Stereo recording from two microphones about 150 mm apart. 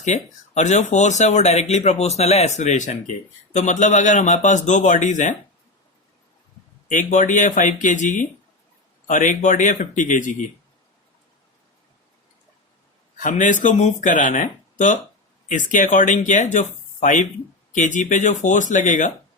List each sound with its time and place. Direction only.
0.0 s speech: 50° left (ahead or behind)
6.8 s speech: 60° left (ahead or behind)
13.1 s speech: 55° left (ahead or behind)